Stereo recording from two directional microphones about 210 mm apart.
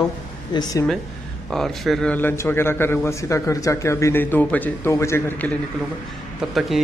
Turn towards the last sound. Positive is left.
turn(degrees=0)  # may be behind; listen again after turning